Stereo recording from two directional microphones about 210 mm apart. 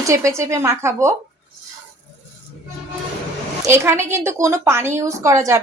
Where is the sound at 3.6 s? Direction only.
10° right (ahead or behind).